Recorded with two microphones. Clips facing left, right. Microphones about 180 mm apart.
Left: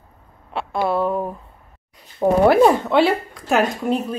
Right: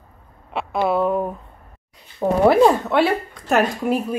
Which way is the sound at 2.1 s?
Centre (ahead or behind).